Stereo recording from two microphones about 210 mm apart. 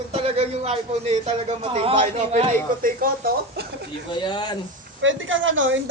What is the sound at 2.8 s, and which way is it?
Speech, 45° right (ahead or behind).